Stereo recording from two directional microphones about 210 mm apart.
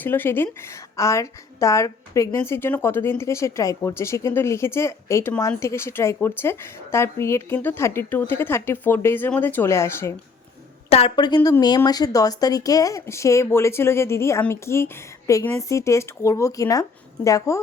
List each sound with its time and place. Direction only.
0.0 s a woman's voice: 10° left (ahead or behind)
10.8 s a woman's voice: 30° left (ahead or behind)